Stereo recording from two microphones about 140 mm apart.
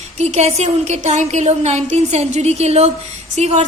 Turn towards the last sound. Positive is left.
turn(degrees=-55)  # may be behind; listen again after turning